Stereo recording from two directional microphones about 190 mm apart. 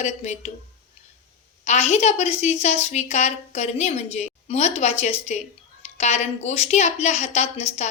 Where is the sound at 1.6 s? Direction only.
35° left (ahead or behind).